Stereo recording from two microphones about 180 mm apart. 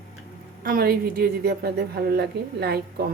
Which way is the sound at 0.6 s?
55° right (ahead or behind).